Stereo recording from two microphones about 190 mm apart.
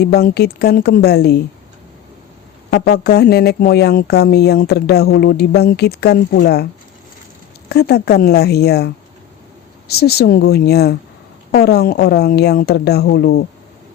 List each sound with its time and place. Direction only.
0.0 s speech: 55° left (ahead or behind)
2.6 s speech: 55° left (ahead or behind)
7.7 s speech: 60° left (ahead or behind)
9.9 s speech: 55° left (ahead or behind)